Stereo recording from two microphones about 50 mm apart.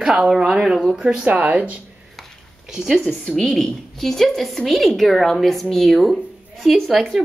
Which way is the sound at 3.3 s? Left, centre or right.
Centre.